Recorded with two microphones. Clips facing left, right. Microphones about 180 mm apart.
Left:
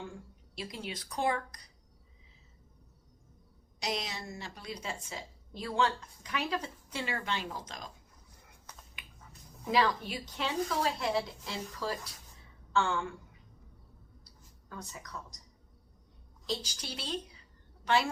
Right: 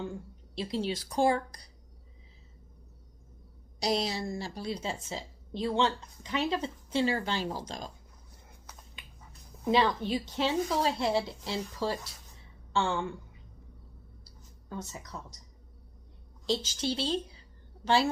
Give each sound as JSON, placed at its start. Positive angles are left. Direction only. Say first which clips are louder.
{"t": 0.5, "sound": "speech", "louder": "right 9 dB", "side_deg": -30}
{"t": 3.8, "sound": "a woman's voice", "louder": "right 7 dB", "side_deg": -35}
{"t": 9.6, "sound": "a woman's voice", "louder": "right 3 dB", "side_deg": -25}
{"t": 14.7, "sound": "a woman's voice", "louder": "right 4 dB", "side_deg": -25}
{"t": 16.5, "sound": "a woman's voice", "louder": "right 7 dB", "side_deg": -25}